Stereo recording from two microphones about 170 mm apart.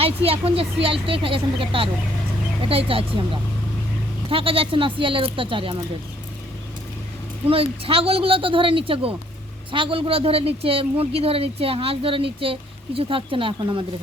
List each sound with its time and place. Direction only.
0.3 s speech: 35° right (ahead or behind)
4.3 s speech: 35° right (ahead or behind)
7.4 s speech: 35° right (ahead or behind)